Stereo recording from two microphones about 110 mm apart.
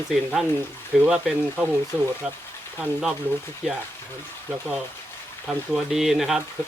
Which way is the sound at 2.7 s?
5° right (ahead or behind).